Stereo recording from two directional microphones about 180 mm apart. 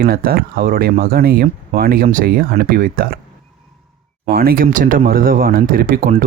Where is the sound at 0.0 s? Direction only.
55° right (ahead or behind).